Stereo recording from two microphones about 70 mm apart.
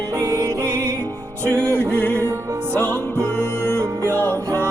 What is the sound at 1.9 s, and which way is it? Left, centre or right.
Music, left.